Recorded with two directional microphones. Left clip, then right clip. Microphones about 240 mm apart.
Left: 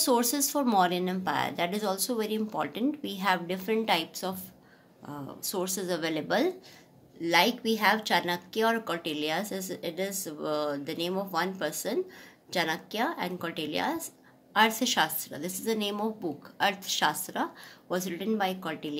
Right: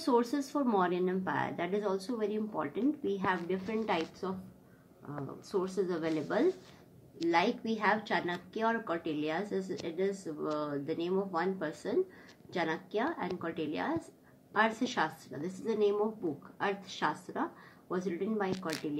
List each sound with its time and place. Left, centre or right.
0.0 s a woman's voice: left
5.5 s a woman's voice: left